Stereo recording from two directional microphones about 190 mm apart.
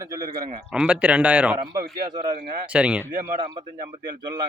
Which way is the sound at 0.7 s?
5° right (ahead or behind).